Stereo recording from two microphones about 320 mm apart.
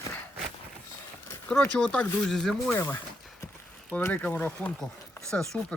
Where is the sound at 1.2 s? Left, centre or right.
Centre.